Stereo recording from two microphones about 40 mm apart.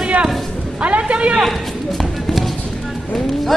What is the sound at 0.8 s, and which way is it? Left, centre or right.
Speech, right.